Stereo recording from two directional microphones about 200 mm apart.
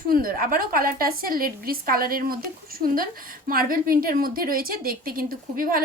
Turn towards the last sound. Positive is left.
turn(degrees=-45)  # may be behind; listen again after turning